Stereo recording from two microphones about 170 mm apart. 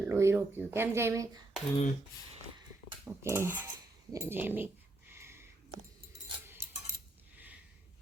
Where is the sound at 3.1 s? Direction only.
15° right (ahead or behind).